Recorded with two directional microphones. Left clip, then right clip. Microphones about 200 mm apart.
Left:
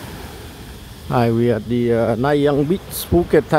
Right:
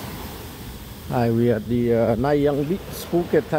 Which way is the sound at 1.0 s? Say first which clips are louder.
Left 4 dB; 15° left (ahead or behind).